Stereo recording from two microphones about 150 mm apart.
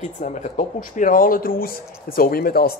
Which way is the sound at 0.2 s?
55° left (ahead or behind).